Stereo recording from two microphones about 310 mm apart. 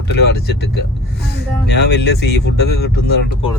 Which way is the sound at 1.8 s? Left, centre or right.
Left.